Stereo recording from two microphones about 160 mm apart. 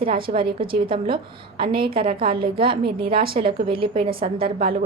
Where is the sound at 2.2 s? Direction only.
30° right (ahead or behind).